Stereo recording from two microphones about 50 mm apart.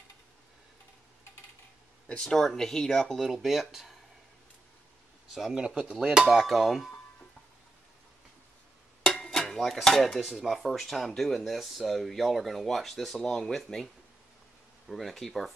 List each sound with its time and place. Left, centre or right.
2.2 s speech: centre
3.3 s speech: centre
5.3 s speech: centre
6.3 s speech: centre
9.2 s a sound: centre
9.6 s speech: centre
14.9 s speech: centre